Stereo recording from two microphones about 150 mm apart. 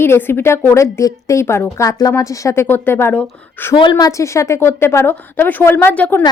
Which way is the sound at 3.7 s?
30° left (ahead or behind).